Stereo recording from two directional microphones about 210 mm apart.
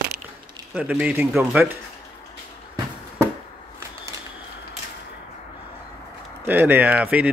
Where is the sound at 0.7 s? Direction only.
5° right (ahead or behind).